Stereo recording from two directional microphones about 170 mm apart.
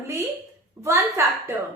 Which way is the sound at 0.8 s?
15° right (ahead or behind).